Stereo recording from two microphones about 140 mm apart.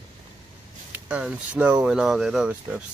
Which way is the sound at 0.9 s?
10° right (ahead or behind).